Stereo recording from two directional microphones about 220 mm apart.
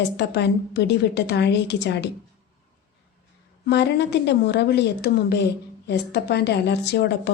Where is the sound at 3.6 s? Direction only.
50° left (ahead or behind).